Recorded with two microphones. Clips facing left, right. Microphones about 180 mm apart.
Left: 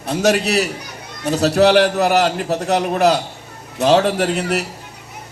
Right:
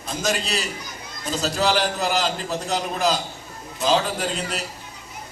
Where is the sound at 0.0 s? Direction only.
65° left (ahead or behind).